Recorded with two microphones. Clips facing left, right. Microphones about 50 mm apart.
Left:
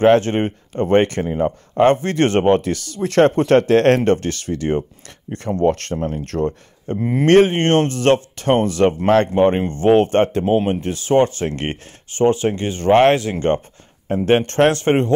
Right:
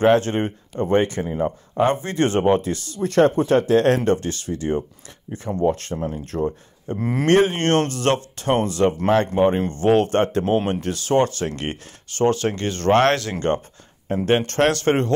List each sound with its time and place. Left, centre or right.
0.0 s speech: left
1.2 s speech: left
1.8 s speech: left
3.0 s speech: left
4.0 s speech: left
5.6 s speech: left
5.9 s speech: left
6.2 s speech: left
7.0 s speech: centre
7.2 s speech: left
10.4 s speech: centre
10.8 s speech: left